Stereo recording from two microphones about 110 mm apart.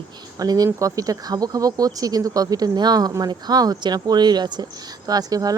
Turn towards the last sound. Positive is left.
turn(degrees=-35)  # may be behind; listen again after turning